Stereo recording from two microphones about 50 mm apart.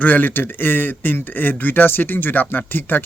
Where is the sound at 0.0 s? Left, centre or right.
Left.